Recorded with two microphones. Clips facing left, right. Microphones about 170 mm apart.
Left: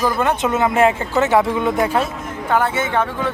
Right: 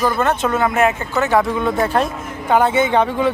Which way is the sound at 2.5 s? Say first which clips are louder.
Right 4 dB; 20° right (ahead or behind).